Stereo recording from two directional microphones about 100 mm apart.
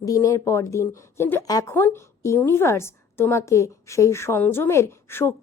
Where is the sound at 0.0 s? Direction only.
35° left (ahead or behind).